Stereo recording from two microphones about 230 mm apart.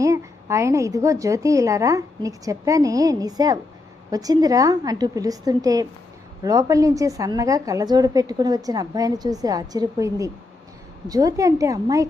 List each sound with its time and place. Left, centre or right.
0.0 s a woman's voice: centre